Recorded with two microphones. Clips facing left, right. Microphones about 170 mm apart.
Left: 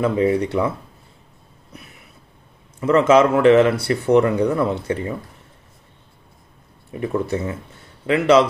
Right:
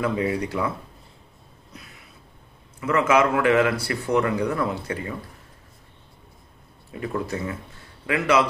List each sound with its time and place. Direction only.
0.0 s speech: 25° left (ahead or behind)
2.8 s speech: 30° left (ahead or behind)
6.9 s speech: 25° left (ahead or behind)